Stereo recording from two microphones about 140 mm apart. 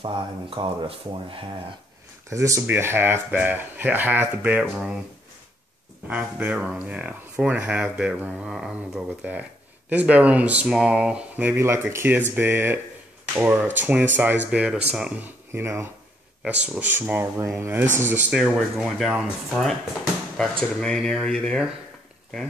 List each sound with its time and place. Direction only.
0.0 s speech: 35° right (ahead or behind)
2.2 s speech: 20° right (ahead or behind)
6.0 s speech: 10° right (ahead or behind)
18.3 s speech: centre (ahead or behind)
20.3 s speech: 5° left (ahead or behind)